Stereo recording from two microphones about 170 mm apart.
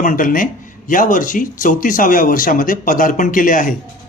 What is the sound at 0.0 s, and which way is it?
Speech, 50° left (ahead or behind).